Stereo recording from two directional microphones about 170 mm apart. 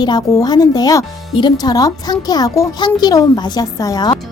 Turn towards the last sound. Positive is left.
turn(degrees=25)  # may be behind; listen again after turning